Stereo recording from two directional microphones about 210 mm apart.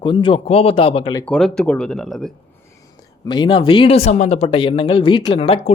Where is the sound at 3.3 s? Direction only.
25° left (ahead or behind).